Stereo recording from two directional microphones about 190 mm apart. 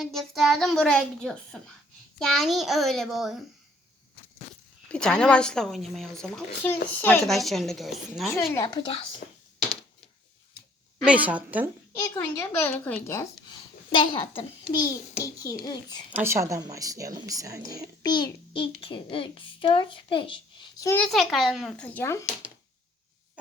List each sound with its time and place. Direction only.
0.0 s speech: centre (ahead or behind)
4.9 s speech: 5° left (ahead or behind)
8.3 s a child's voice: 15° left (ahead or behind)
11.0 s a woman's voice: 5° right (ahead or behind)
11.9 s a woman's voice: 15° left (ahead or behind)
13.9 s a child's voice: 25° left (ahead or behind)
16.1 s a woman's voice: 15° right (ahead or behind)
18.0 s a child's voice: 20° left (ahead or behind)
20.9 s speech: 5° left (ahead or behind)